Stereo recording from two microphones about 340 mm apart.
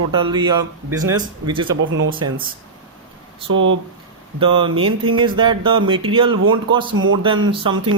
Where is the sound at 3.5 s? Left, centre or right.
Right.